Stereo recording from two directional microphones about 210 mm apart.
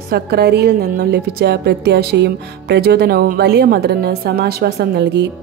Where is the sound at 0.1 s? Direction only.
50° right (ahead or behind).